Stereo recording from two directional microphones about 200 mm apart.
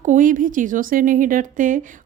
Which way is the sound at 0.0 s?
40° right (ahead or behind).